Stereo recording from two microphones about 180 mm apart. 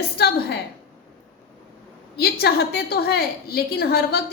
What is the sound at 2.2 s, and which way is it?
A woman's voice, 60° left (ahead or behind).